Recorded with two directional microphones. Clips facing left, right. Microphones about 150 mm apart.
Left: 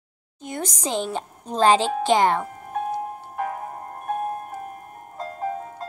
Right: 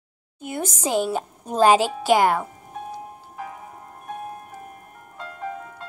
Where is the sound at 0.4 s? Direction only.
10° right (ahead or behind).